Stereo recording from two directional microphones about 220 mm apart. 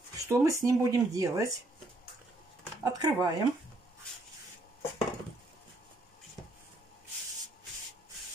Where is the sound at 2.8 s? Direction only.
15° right (ahead or behind).